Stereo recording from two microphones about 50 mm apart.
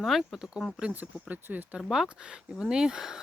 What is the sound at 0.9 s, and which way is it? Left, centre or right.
Speech, right.